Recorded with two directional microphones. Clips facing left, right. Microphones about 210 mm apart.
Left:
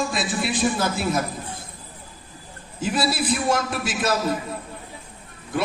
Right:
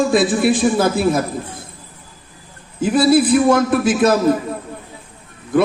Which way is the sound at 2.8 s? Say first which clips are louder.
Right 11 dB; 55° right (ahead or behind).